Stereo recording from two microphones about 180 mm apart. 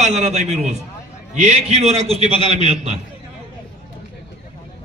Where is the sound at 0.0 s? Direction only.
40° right (ahead or behind).